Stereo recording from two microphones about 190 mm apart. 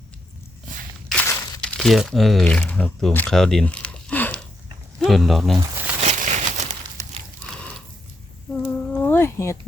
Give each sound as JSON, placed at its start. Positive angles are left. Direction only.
{"t": 1.1, "sound": "crumpling", "side_deg": 15}
{"t": 4.9, "sound": "speech", "side_deg": 0}
{"t": 6.0, "sound": "a sound", "side_deg": -40}
{"t": 7.4, "sound": "gasp", "side_deg": 5}
{"t": 8.6, "sound": "insect", "side_deg": 10}